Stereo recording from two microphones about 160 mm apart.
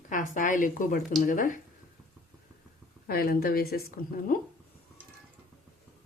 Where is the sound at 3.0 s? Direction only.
70° left (ahead or behind).